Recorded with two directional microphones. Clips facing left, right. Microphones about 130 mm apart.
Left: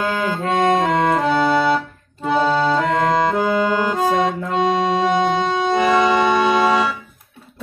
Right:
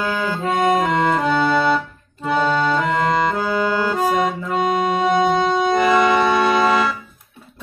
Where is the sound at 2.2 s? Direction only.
30° left (ahead or behind).